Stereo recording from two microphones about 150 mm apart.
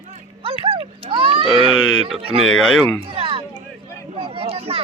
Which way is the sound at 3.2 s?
35° right (ahead or behind).